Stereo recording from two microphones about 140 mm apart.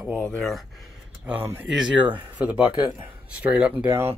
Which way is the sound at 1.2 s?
15° right (ahead or behind).